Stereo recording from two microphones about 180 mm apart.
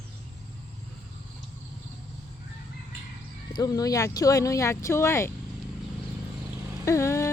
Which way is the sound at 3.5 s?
20° left (ahead or behind).